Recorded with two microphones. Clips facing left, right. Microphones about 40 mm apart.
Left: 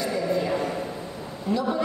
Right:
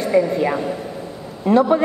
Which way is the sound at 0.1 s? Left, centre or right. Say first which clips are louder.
Right 11 dB; right.